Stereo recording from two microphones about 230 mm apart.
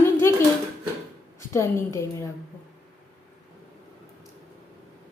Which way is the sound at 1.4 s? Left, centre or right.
Centre.